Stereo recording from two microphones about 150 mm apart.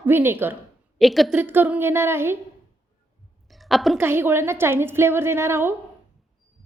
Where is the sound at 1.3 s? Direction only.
15° right (ahead or behind).